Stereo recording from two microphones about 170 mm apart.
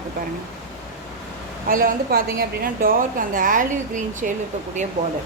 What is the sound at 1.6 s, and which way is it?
A woman's voice, 55° right (ahead or behind).